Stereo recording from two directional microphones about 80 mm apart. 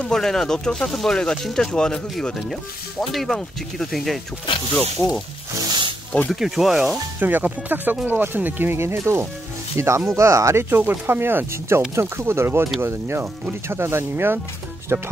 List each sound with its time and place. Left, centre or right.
0.0 s speech: centre
5.7 s wild animals: right
6.3 s speech: centre
7.2 s speech: right